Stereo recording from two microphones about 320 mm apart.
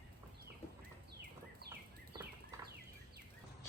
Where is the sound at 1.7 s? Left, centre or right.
Centre.